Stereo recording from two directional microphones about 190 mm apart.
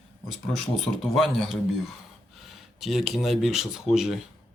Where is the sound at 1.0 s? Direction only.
Centre (ahead or behind).